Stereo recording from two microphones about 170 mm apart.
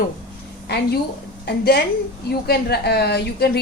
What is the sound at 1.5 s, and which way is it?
A woman's voice, 70° left (ahead or behind).